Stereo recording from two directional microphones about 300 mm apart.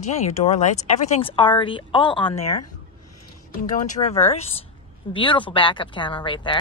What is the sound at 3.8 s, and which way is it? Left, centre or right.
Speech, left.